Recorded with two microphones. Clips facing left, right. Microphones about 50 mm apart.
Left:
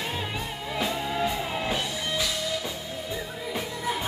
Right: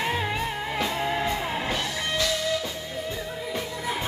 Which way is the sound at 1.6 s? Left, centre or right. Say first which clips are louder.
Right 1 dB; centre.